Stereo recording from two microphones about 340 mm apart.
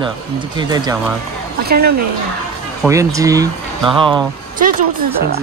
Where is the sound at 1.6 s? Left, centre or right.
Right.